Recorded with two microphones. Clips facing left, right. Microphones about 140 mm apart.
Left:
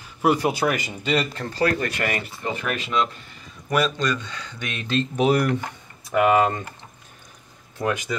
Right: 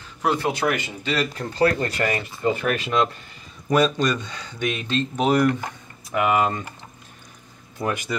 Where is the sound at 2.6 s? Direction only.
45° right (ahead or behind).